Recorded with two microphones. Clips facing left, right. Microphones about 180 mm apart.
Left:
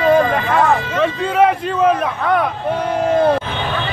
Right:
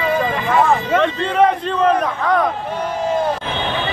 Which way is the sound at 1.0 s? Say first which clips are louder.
Left 1 dB; 5° left (ahead or behind).